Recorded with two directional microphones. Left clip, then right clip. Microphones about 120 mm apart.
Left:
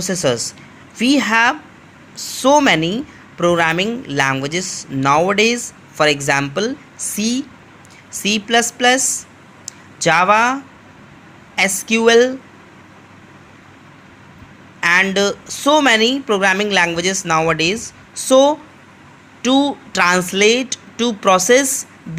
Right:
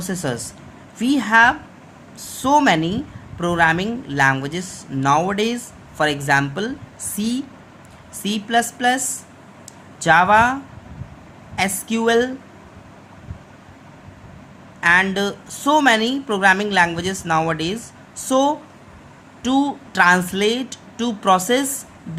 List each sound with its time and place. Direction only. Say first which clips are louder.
0.0 s speech: left 8 dB; 25° left (ahead or behind)
14.8 s a sound: left 1 dB; 30° left (ahead or behind)
15.1 s speech: left 6 dB; 25° left (ahead or behind)